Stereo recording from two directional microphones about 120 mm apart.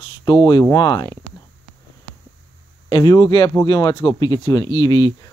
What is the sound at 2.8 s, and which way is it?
Speech, 35° left (ahead or behind).